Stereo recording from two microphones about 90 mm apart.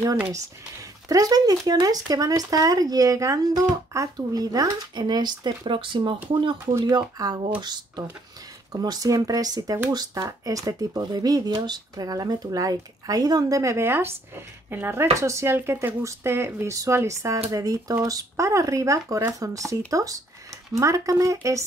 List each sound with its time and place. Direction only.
1.0 s speech: 40° right (ahead or behind); by 6.1 s 70° right (ahead or behind)
6.8 s speech: 50° right (ahead or behind)